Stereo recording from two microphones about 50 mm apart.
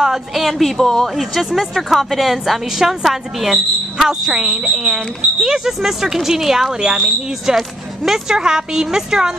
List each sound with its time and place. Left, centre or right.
0.0 s a woman's voice: centre